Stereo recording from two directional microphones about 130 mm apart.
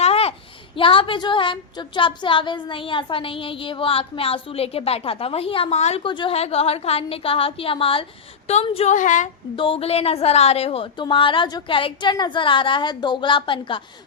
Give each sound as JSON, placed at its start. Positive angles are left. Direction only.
{"t": 0.0, "sound": "a sound", "side_deg": 50}
{"t": 0.8, "sound": "a woman's voice", "side_deg": 40}
{"t": 8.9, "sound": "speech", "side_deg": 75}
{"t": 9.6, "sound": "a woman's voice", "side_deg": 45}